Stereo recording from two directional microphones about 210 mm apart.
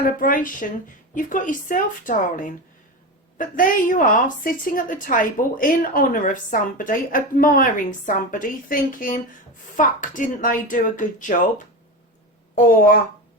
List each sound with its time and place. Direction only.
0.0 s a woman's voice: 40° left (ahead or behind)
12.5 s a woman's voice: 40° left (ahead or behind)